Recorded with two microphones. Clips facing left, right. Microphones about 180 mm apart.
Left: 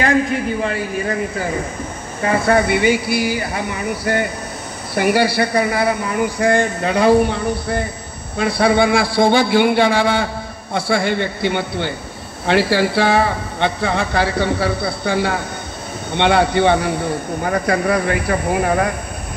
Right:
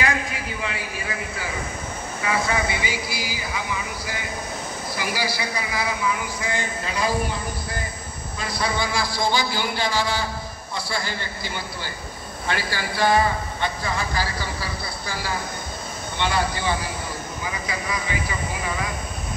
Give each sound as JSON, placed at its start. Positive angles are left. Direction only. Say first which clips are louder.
{"t": 0.0, "sound": "a man's voice", "louder": "left 9 dB", "side_deg": 45}